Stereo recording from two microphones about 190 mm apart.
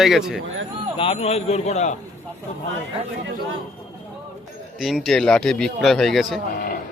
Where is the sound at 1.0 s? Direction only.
30° left (ahead or behind).